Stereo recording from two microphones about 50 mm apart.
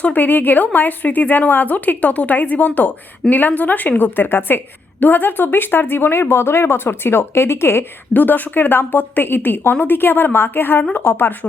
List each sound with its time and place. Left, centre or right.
0.0 s speech: left
8.1 s a woman's voice: left